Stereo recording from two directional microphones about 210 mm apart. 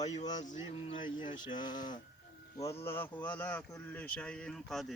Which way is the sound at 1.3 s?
20° left (ahead or behind).